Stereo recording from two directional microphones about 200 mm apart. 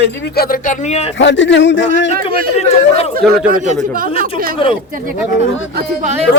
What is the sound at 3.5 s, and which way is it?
Speech, 40° right (ahead or behind).